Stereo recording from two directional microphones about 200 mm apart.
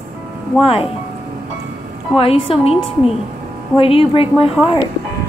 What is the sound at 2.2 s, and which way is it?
Speech, 30° left (ahead or behind).